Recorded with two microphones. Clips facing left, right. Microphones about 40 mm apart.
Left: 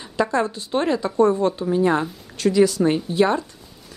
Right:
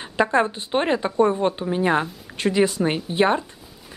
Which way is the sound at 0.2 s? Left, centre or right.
Right.